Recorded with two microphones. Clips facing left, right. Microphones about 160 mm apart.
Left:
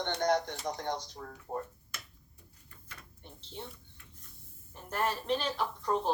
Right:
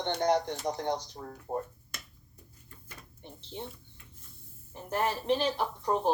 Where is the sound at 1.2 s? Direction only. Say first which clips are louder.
Right 3 dB; 25° right (ahead or behind).